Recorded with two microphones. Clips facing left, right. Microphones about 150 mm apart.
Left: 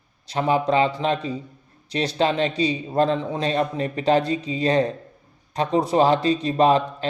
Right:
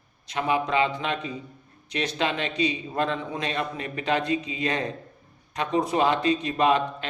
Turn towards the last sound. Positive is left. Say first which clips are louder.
# left 4 dB
turn(degrees=35)  # may be behind; listen again after turning